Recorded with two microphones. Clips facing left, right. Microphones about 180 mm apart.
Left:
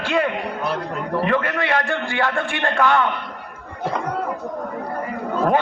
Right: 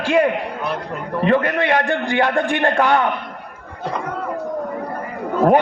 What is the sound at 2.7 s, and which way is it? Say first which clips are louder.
Speech: even; 35° right (ahead or behind).